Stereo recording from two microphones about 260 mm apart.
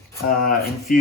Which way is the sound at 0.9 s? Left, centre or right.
Left.